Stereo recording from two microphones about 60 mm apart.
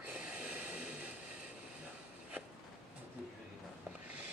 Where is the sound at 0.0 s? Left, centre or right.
Right.